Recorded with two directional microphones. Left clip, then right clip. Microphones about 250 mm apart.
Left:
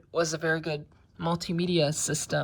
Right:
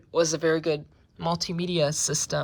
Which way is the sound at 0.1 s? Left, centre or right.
Centre.